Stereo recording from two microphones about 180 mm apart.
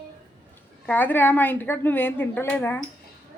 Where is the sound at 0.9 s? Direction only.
10° left (ahead or behind).